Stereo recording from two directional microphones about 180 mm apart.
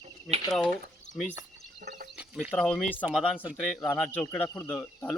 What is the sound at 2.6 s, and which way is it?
Speech, 5° left (ahead or behind).